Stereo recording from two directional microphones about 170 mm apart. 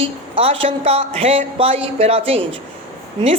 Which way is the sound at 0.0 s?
35° right (ahead or behind).